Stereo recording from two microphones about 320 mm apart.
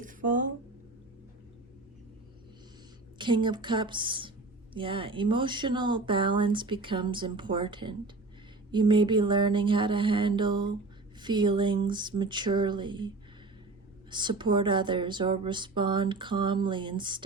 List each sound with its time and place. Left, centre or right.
0.0 s a sound: right
3.2 s speech: centre
14.1 s speech: centre